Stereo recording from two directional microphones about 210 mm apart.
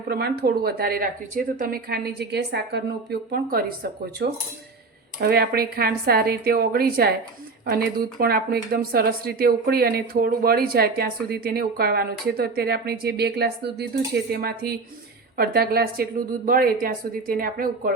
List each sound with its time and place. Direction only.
0.1 s speech: 50° right (ahead or behind)